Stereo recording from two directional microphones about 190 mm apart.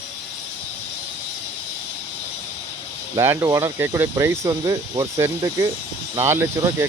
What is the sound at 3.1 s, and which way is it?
Speech, 15° right (ahead or behind).